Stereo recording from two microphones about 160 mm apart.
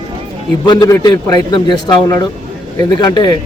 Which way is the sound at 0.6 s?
25° left (ahead or behind).